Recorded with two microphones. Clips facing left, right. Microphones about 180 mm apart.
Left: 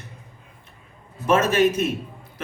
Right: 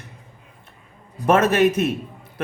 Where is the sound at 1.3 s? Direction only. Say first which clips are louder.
Right 2 dB; 55° right (ahead or behind).